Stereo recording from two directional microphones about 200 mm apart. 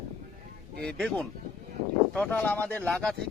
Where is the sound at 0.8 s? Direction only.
5° left (ahead or behind).